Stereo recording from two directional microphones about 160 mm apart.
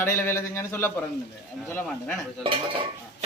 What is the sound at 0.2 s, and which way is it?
Speech, 15° left (ahead or behind).